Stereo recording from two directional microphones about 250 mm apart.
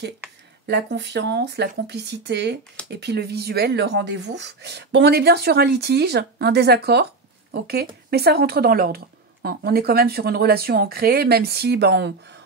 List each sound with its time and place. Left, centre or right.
0.7 s speech: right